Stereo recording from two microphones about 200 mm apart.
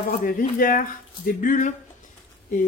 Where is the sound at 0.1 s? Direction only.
45° left (ahead or behind).